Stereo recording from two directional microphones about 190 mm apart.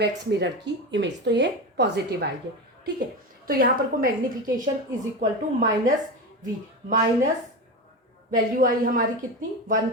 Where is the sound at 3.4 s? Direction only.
50° right (ahead or behind).